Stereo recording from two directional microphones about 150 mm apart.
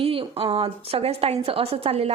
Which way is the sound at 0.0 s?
40° right (ahead or behind).